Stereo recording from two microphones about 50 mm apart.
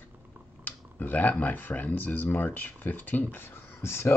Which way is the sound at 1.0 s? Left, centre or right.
Left.